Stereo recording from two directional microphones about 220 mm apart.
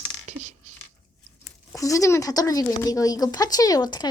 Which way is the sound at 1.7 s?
15° left (ahead or behind).